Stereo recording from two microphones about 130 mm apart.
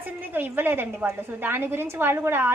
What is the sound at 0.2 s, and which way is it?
Speech, 15° right (ahead or behind).